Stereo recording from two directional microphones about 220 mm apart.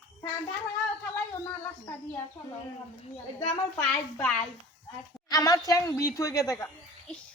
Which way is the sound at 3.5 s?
10° left (ahead or behind).